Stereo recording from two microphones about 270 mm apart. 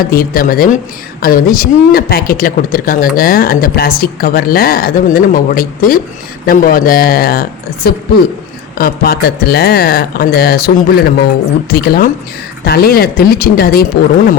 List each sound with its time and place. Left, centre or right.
0.0 s speech: left
8.8 s speech: left